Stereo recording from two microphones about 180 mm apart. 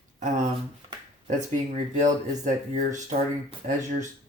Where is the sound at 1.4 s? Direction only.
40° right (ahead or behind).